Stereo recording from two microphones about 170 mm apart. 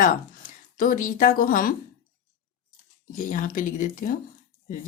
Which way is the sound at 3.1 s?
50° left (ahead or behind).